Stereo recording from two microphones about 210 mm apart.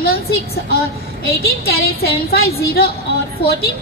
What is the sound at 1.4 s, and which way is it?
A woman's voice, 45° left (ahead or behind).